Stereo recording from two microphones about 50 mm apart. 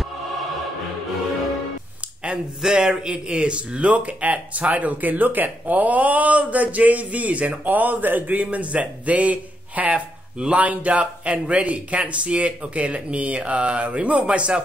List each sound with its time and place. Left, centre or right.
2.2 s speech: centre